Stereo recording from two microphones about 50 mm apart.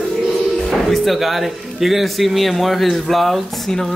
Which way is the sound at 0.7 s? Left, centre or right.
Centre.